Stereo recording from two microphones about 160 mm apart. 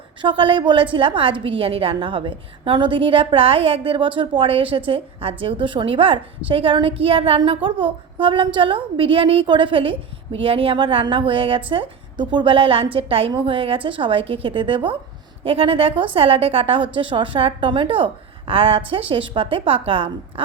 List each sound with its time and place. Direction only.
0.2 s a woman's voice: 30° right (ahead or behind)